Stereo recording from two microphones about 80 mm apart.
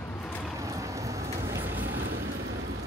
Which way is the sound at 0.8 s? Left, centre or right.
Right.